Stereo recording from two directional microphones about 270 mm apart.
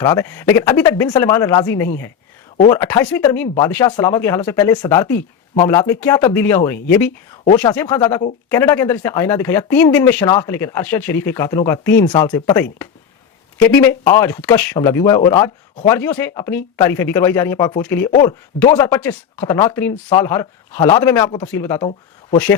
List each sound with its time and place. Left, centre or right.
0.0 s speech: centre